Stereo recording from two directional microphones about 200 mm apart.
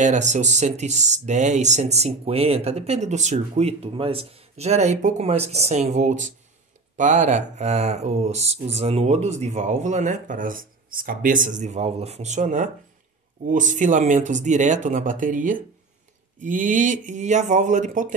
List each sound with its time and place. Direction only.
0.0 s speech: 35° right (ahead or behind)